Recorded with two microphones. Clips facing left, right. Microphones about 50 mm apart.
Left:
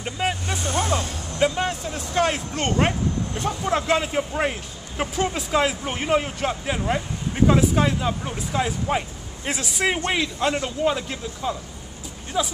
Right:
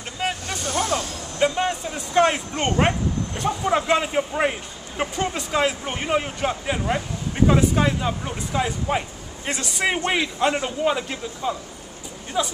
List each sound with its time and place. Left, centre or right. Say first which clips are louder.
0.2 s speech: left 1 dB; centre
0.7 s speech: even; left
1.4 s a man's voice: right 1 dB; centre
9.9 s a man's voice: right 1 dB; centre